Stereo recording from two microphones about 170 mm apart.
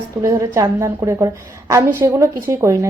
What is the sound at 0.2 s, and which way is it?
A woman's voice, 15° right (ahead or behind).